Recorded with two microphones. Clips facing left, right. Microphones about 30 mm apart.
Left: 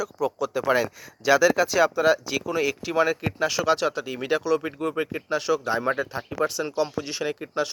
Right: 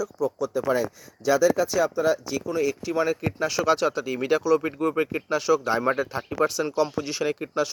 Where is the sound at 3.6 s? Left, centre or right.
Left.